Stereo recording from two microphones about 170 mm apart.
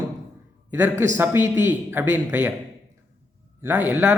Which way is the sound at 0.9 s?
45° right (ahead or behind).